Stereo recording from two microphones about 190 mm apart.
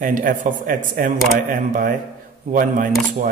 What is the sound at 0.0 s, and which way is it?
A man's voice, 45° right (ahead or behind).